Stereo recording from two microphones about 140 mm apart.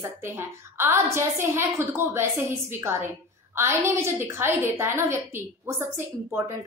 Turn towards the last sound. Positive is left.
turn(degrees=-15)  # may be behind; listen again after turning